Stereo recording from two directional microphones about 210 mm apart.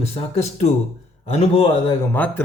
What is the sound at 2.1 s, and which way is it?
Speech, 10° left (ahead or behind).